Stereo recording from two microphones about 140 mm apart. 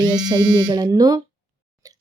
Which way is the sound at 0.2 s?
30° right (ahead or behind).